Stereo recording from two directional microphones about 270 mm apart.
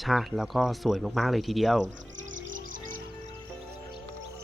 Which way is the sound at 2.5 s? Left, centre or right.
Right.